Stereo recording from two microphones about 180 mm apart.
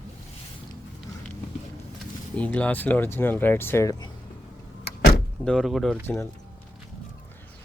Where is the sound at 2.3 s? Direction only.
5° left (ahead or behind).